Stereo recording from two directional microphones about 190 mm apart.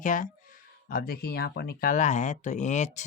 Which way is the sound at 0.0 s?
45° left (ahead or behind).